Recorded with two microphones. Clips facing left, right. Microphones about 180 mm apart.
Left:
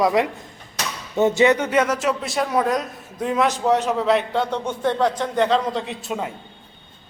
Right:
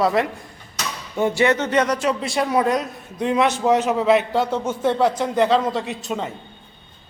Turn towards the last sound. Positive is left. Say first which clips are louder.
# right 1 dB
turn(degrees=5)  # may be behind; listen again after turning